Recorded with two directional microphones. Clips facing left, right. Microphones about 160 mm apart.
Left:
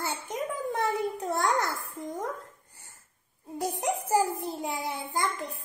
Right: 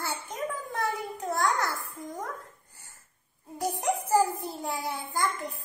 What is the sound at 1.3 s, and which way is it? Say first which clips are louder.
Babbling: right 1 dB; 25° left (ahead or behind).